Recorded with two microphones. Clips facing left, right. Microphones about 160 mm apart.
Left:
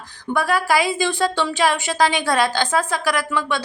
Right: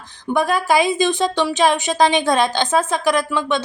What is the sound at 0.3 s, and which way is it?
A woman's voice, 20° right (ahead or behind).